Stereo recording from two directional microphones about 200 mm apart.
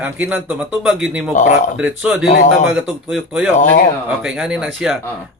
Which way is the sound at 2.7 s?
5° right (ahead or behind).